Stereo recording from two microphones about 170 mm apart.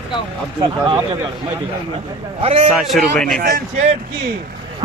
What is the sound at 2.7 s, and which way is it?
Speech, centre (ahead or behind).